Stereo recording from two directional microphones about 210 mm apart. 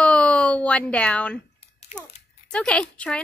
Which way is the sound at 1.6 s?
30° left (ahead or behind).